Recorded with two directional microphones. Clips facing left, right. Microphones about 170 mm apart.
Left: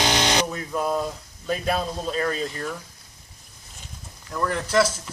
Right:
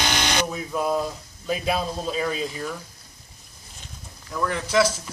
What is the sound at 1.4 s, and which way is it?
Speech, 5° right (ahead or behind).